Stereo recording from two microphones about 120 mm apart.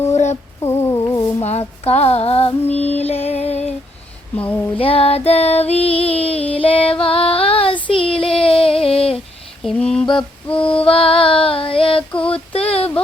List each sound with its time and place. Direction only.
0.1 s a sound: 75° left (ahead or behind)
0.6 s humming: 20° left (ahead or behind)
1.4 s child singing: 60° left (ahead or behind)
2.6 s music: 60° left (ahead or behind)
4.4 s mantra: 15° left (ahead or behind)
4.8 s female singing: 55° left (ahead or behind)
7.9 s child singing: 50° left (ahead or behind)
9.6 s mantra: 5° left (ahead or behind)
10.6 s female singing: 50° left (ahead or behind)
12.3 s child singing: 55° left (ahead or behind)